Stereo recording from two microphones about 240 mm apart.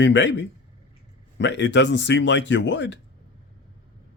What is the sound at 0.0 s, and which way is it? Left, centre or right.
Speech, left.